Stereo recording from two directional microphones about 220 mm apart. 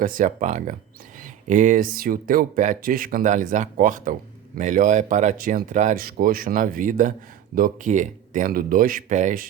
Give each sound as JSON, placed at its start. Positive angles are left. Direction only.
{"t": 0.0, "sound": "speech", "side_deg": -40}